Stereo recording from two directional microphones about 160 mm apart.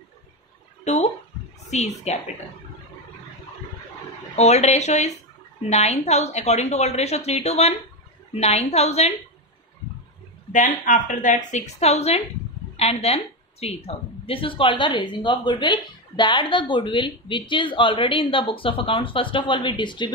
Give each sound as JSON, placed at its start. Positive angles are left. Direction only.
{"t": 0.9, "sound": "a woman's voice", "side_deg": 45}
{"t": 1.6, "sound": "a sound", "side_deg": 45}
{"t": 4.4, "sound": "a woman's voice", "side_deg": 45}
{"t": 10.5, "sound": "a woman's voice", "side_deg": 55}